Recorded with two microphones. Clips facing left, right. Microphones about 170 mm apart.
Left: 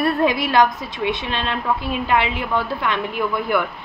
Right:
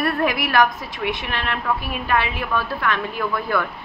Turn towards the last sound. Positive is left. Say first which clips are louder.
# left 2 dB
turn(degrees=20)  # may be behind; listen again after turning